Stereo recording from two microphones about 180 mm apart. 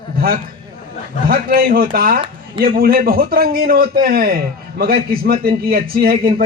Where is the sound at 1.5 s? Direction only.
55° right (ahead or behind).